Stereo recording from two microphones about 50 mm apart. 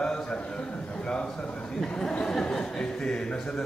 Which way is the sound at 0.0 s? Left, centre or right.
Centre.